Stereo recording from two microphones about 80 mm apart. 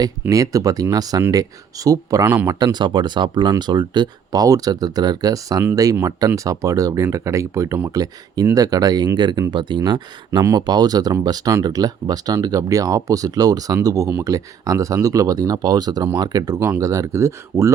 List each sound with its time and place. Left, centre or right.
0.0 s speech: right
2.2 s speech: right
2.5 s speech: right
2.7 s speech: right
7.9 s speech: right
9.1 s speech: right
10.5 s speech: right
16.6 s speech: right
16.8 s speech: right